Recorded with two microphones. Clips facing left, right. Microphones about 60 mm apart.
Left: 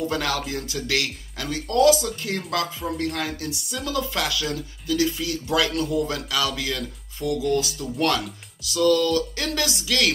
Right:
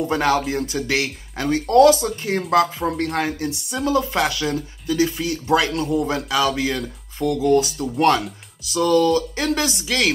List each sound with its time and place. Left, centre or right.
0.1 s speech: right
2.8 s speech: right
3.2 s speech: right